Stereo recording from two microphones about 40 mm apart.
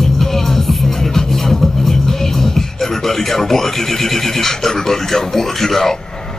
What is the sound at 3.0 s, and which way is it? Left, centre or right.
Speech, centre.